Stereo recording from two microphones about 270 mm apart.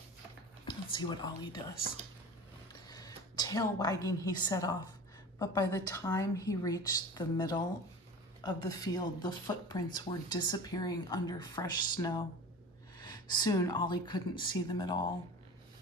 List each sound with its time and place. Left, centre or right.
0.7 s a woman's voice: centre
2.7 s a sound: centre
5.4 s speech: centre